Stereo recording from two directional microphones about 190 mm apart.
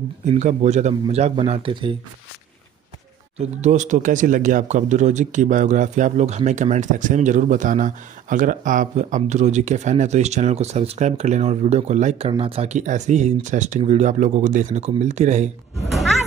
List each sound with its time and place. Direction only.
0.3 s speech: 35° right (ahead or behind)
3.3 s speech: 40° right (ahead or behind)